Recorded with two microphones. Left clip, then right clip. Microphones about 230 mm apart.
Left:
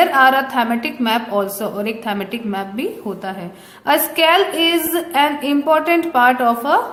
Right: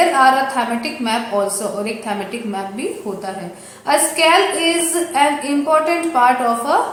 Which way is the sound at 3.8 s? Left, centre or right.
Left.